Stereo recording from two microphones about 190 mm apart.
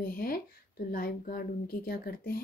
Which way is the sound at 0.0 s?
50° left (ahead or behind).